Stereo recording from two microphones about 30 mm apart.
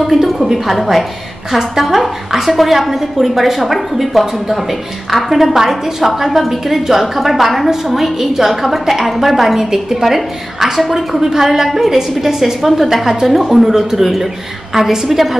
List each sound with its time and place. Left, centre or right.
0.0 s a woman's voice: centre